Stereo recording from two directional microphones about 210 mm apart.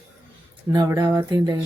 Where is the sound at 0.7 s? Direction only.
15° right (ahead or behind).